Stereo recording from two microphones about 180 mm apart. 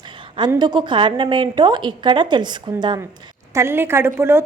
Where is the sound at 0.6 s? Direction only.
25° right (ahead or behind).